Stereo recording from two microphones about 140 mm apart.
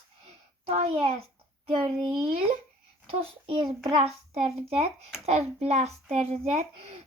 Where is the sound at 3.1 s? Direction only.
45° right (ahead or behind).